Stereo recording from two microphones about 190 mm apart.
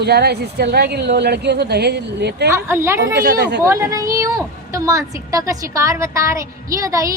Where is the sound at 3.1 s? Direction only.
60° right (ahead or behind).